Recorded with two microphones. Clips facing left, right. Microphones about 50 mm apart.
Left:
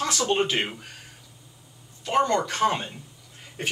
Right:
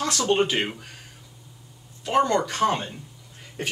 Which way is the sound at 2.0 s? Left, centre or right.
Centre.